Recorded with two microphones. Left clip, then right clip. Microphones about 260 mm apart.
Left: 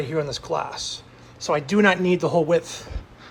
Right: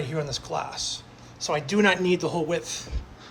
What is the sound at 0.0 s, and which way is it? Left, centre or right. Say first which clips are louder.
Speech: left 5 dB; centre.